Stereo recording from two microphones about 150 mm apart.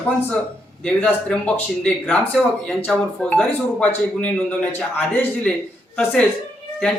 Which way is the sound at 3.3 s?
10° left (ahead or behind).